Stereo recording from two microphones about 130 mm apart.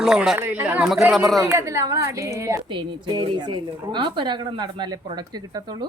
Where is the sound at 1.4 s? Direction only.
20° right (ahead or behind).